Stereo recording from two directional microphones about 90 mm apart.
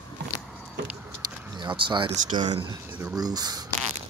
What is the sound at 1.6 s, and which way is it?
Speech, 65° right (ahead or behind).